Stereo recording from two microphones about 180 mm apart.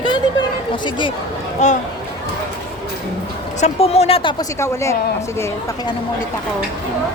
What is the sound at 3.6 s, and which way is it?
Speech, 35° left (ahead or behind).